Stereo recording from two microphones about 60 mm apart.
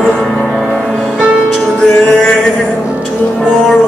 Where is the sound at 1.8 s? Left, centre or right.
Centre.